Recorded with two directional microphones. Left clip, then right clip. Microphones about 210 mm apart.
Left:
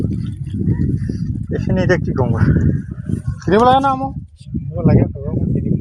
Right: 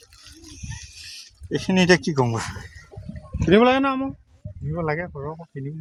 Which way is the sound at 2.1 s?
65° right (ahead or behind).